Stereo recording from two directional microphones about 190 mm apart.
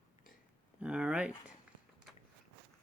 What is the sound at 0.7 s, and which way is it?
Speech, 5° right (ahead or behind).